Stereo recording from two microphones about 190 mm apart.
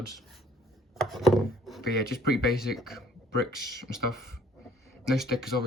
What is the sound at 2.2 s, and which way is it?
Speech, 55° left (ahead or behind).